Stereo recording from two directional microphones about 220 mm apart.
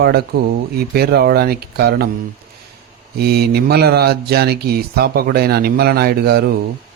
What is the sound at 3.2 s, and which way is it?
Speech, 45° right (ahead or behind).